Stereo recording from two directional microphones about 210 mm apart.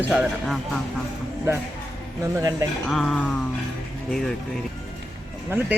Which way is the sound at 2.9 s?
Centre (ahead or behind).